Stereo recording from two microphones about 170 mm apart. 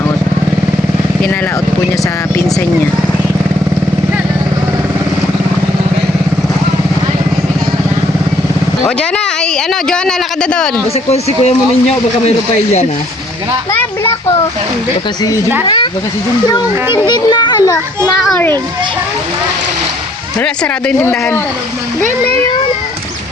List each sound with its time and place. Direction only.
9.0 s a sound: 5° left (ahead or behind)
9.9 s speech: 5° left (ahead or behind)
11.1 s a man's voice: 40° left (ahead or behind)
15.6 s a sound: 30° left (ahead or behind)
16.5 s a child's voice: 25° left (ahead or behind)
18.3 s speech: 10° left (ahead or behind)
20.4 s speech: 10° left (ahead or behind)